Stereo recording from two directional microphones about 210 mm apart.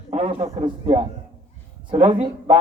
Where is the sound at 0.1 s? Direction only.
30° right (ahead or behind).